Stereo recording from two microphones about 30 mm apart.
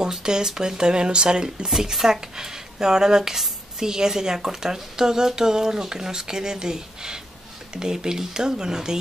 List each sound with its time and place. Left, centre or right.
0.2 s a woman's voice: right
1.8 s a woman's voice: centre